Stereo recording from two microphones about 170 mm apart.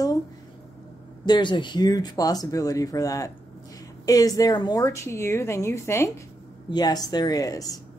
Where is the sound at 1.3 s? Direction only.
30° left (ahead or behind).